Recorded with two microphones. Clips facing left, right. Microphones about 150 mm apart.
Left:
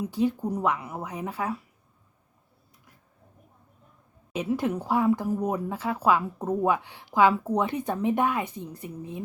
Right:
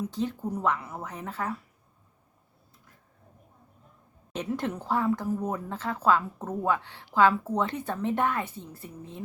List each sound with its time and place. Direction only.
0.0 s a woman's voice: 10° left (ahead or behind)
4.3 s a woman's voice: 5° left (ahead or behind)